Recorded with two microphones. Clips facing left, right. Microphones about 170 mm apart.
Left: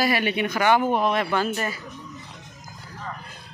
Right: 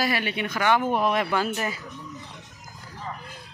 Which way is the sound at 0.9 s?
10° right (ahead or behind).